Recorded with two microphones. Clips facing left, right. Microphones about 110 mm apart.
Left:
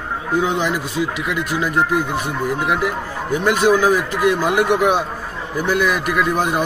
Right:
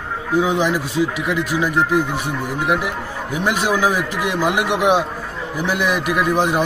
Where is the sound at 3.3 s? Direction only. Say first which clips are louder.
Left 4 dB; 10° right (ahead or behind).